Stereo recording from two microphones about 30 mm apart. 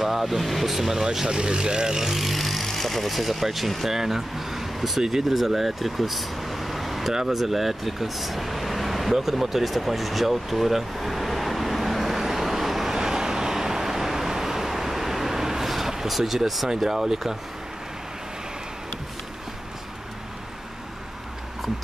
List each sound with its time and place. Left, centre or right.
0.0 s speech: centre
1.2 s speech: right
2.0 s speech: centre
9.1 s vehicle: centre
12.9 s vehicle: centre
16.1 s speech: centre